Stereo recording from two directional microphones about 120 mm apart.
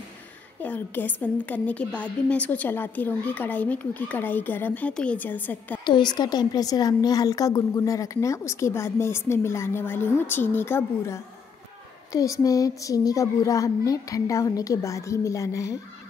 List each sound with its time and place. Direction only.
0.6 s a woman's voice: 15° left (ahead or behind)
5.9 s a woman's voice: 40° left (ahead or behind)